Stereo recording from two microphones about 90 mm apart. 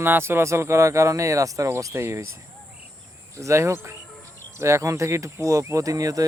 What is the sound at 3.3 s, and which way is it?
Speech, 35° right (ahead or behind).